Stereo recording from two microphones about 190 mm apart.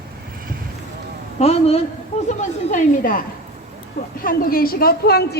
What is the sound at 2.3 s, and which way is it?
Speech, 45° left (ahead or behind).